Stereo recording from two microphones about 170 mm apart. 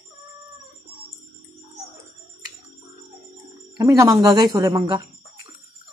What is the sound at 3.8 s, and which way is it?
Speech, 20° right (ahead or behind).